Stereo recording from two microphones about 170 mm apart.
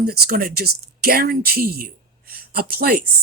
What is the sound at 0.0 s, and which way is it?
Speech, 65° right (ahead or behind).